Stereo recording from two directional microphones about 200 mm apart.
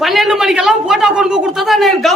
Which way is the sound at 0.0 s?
Centre (ahead or behind).